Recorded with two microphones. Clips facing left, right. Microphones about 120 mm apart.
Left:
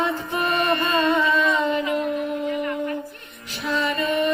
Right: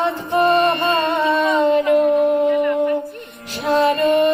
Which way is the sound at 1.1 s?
55° right (ahead or behind).